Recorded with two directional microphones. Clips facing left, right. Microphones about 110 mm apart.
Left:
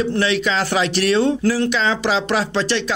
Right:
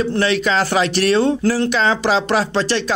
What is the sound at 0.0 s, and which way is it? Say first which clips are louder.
Speech: right 1 dB; 45° right (ahead or behind).